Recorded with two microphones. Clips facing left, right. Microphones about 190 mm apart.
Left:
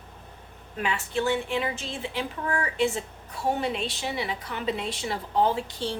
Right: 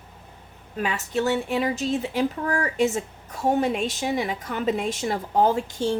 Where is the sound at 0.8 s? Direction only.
40° right (ahead or behind).